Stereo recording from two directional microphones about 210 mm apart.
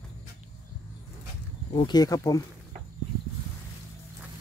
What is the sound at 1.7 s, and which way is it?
Speech, 20° left (ahead or behind).